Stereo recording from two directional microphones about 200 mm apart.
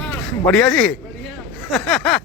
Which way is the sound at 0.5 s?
5° left (ahead or behind).